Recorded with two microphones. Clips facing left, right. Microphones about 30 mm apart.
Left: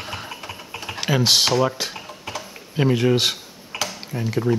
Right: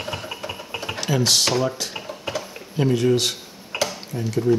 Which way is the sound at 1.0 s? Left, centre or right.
Left.